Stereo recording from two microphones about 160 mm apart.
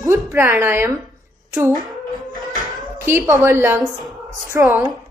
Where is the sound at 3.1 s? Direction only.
15° right (ahead or behind).